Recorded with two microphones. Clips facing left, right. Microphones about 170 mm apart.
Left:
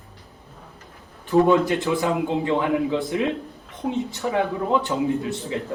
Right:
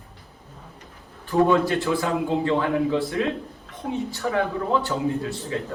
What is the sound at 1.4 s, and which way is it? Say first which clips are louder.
A man's voice: left 1 dB; 20° left (ahead or behind).